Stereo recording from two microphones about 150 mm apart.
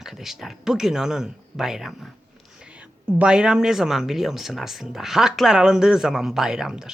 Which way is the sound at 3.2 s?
5° right (ahead or behind).